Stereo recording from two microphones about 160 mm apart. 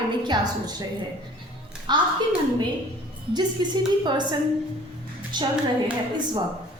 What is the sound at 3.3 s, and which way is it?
Speech, 25° right (ahead or behind).